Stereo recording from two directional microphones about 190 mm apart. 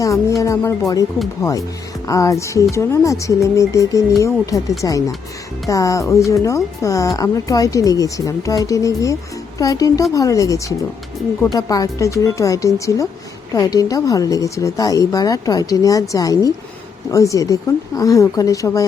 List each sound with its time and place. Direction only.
0.0 s a woman's voice: 15° left (ahead or behind)